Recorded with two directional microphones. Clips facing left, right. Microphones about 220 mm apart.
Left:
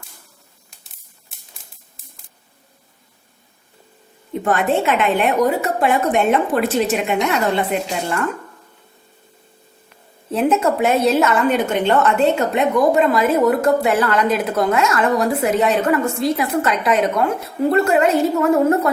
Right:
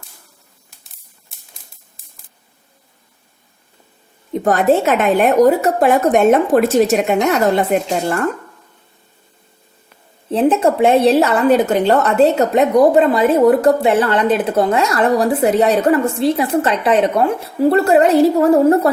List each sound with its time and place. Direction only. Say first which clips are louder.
2.0 s scissors: left 4 dB; centre (ahead or behind)
4.3 s a woman's voice: right 5 dB; 40° right (ahead or behind)
10.3 s a woman's voice: right 3 dB; 30° right (ahead or behind)